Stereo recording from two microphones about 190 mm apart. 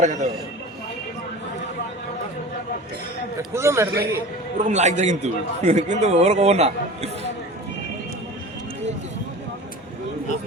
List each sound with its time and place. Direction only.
0.0 s a man's voice: 40° right (ahead or behind)
3.5 s a man's voice: 15° right (ahead or behind)
4.5 s a man's voice: 40° right (ahead or behind)